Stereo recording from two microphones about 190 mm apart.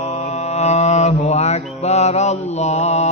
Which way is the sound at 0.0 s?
35° left (ahead or behind).